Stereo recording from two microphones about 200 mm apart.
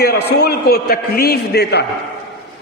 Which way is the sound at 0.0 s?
55° left (ahead or behind).